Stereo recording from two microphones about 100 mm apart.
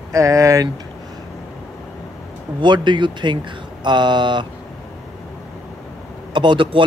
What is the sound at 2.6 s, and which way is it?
Speech, 50° right (ahead or behind).